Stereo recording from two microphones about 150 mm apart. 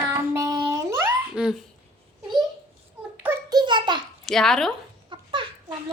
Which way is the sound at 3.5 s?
30° right (ahead or behind).